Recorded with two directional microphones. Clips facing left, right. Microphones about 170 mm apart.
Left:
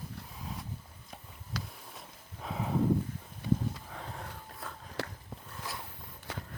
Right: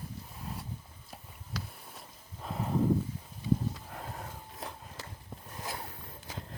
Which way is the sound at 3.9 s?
5° right (ahead or behind).